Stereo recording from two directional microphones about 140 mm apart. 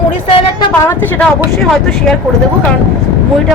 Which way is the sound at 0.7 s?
10° left (ahead or behind).